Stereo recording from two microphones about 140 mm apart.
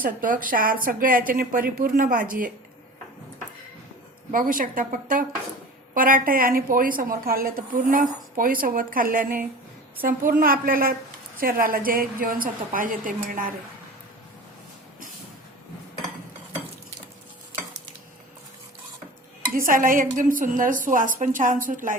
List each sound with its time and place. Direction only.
0.0 s a woman's voice: 75° right (ahead or behind)
4.3 s a woman's voice: 75° right (ahead or behind)
19.5 s a woman's voice: 80° right